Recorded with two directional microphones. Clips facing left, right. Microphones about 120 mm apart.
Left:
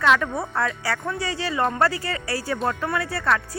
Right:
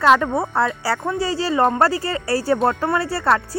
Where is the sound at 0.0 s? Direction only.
35° right (ahead or behind).